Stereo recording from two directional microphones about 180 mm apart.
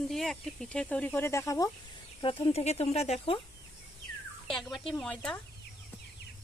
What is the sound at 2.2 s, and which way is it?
Speech, 30° left (ahead or behind).